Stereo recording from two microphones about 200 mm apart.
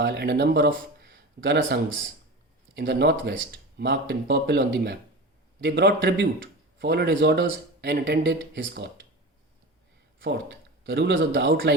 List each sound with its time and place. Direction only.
0.0 s speech: 60° right (ahead or behind)
10.2 s speech: 65° right (ahead or behind)